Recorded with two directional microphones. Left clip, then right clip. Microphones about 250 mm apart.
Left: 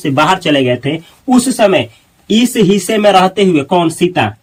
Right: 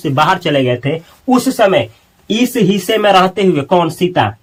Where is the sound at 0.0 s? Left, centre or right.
Right.